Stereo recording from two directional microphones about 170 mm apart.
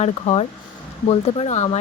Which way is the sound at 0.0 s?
40° left (ahead or behind).